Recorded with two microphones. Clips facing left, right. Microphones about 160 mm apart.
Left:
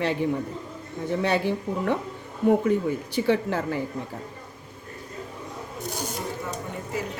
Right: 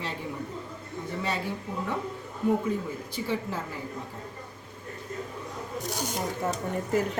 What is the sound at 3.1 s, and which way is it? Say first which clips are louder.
Speech: left 7 dB; 85° left.